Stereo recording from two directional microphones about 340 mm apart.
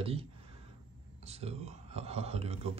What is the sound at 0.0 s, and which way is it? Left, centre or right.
A man's voice, centre.